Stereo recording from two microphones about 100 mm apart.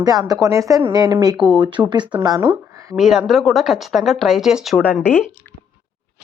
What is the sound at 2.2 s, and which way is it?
Speech, 40° right (ahead or behind).